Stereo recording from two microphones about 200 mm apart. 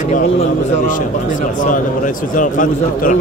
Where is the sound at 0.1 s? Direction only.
40° left (ahead or behind).